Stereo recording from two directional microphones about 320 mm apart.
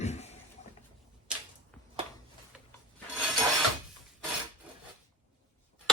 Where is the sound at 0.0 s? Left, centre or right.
Left.